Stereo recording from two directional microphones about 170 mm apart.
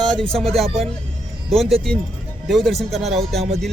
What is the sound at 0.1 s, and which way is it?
Speech, 5° left (ahead or behind).